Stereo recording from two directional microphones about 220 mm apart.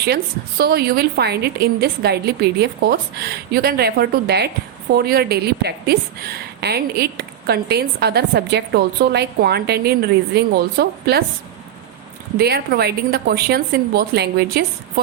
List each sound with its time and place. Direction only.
0.6 s a woman's voice: 45° right (ahead or behind)
12.4 s a woman's voice: 45° right (ahead or behind)